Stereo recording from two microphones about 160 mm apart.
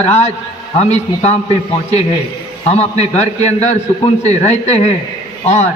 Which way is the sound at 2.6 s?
45° left (ahead or behind).